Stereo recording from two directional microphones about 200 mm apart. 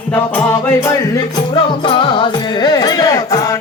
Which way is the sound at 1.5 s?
25° left (ahead or behind).